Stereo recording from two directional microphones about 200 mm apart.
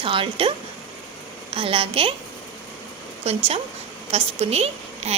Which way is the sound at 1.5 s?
25° right (ahead or behind).